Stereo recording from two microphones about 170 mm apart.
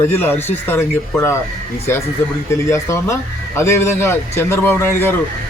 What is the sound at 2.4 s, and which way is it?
Speech, 15° left (ahead or behind).